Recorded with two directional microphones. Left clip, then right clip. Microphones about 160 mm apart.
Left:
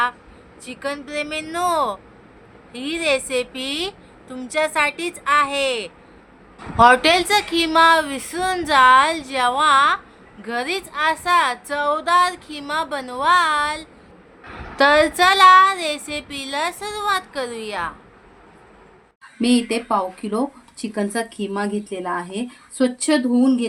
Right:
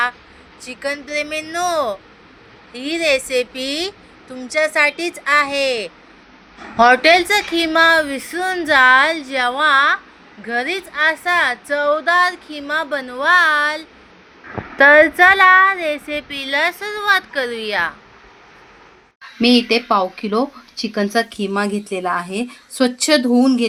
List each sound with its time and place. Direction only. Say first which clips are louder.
0.6 s a woman's voice: right 3 dB; 10° right (ahead or behind)
19.4 s speech: right 6 dB; 25° right (ahead or behind)